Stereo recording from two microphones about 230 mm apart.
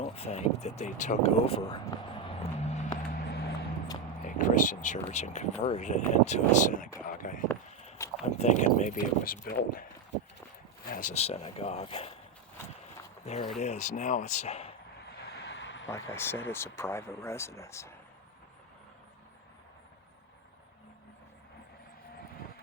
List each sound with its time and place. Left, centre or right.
0.0 s speech: left
3.2 s vehicle: left
4.2 s speech: left
7.1 s a sound: left
8.0 s a sound: centre
8.4 s speech: left
10.8 s speech: left
13.2 s speech: left
15.2 s vehicle: left
15.9 s speech: centre